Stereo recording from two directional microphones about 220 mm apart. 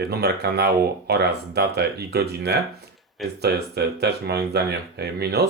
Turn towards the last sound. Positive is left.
turn(degrees=-45)  # may be behind; listen again after turning